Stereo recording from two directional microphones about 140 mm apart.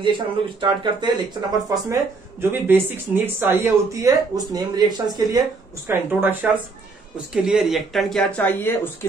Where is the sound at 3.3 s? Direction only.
20° right (ahead or behind).